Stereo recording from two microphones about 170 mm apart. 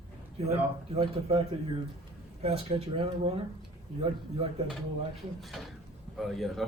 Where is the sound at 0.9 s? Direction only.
35° right (ahead or behind).